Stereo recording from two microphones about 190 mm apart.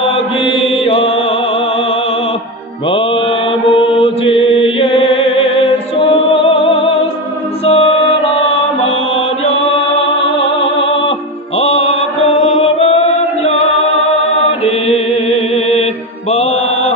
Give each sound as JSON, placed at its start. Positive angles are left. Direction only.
{"t": 0.5, "sound": "mantra", "side_deg": 30}
{"t": 3.7, "sound": "mantra", "side_deg": 30}
{"t": 7.6, "sound": "music", "side_deg": 30}
{"t": 10.8, "sound": "music", "side_deg": 30}
{"t": 11.5, "sound": "mantra", "side_deg": 35}
{"t": 13.4, "sound": "music", "side_deg": 35}